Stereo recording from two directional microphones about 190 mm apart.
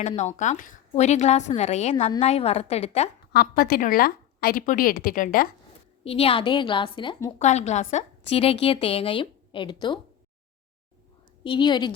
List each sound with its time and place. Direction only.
0.2 s a woman's voice: 40° left (ahead or behind)
3.3 s a woman's voice: 50° left (ahead or behind)
6.1 s a woman's voice: 30° left (ahead or behind)
7.3 s a woman's voice: 35° left (ahead or behind)
11.4 s a woman's voice: 25° left (ahead or behind)